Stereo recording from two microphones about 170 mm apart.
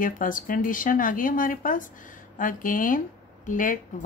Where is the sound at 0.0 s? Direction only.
55° left (ahead or behind).